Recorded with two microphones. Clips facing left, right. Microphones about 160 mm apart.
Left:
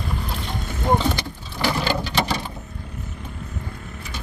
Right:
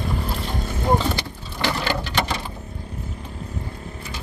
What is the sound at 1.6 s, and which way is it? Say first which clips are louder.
Sewing machine: left 2 dB; 10° left (ahead or behind).